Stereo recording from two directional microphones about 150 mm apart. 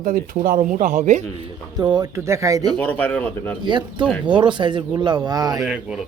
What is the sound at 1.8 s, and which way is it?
Speech, 25° right (ahead or behind).